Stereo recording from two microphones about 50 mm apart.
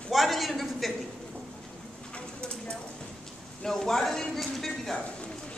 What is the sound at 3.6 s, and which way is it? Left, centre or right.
Speech, centre.